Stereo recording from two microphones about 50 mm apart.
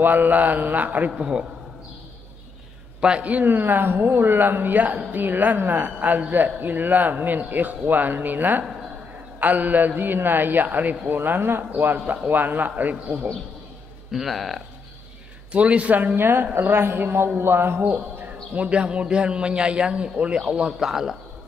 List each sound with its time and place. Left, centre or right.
0.0 s a woman's voice: right
1.1 s a man's voice: centre
3.0 s a man's voice: centre
3.3 s a woman's voice: right
14.1 s speech: centre
15.5 s a man's voice: right
16.2 s speech: right
17.9 s a man's voice: right; by 21.2 s centre